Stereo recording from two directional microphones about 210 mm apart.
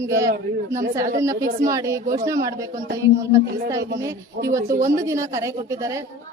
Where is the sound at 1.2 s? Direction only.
15° right (ahead or behind).